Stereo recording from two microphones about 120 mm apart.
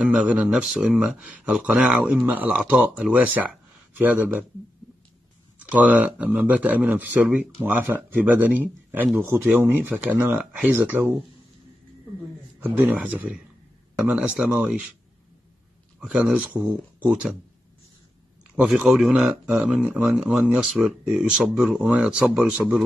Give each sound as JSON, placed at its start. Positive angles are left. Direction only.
{"t": 0.0, "sound": "speech", "side_deg": -10}
{"t": 5.6, "sound": "speech", "side_deg": -10}
{"t": 12.5, "sound": "speech", "side_deg": -15}
{"t": 16.0, "sound": "speech", "side_deg": -5}
{"t": 18.6, "sound": "speech", "side_deg": -5}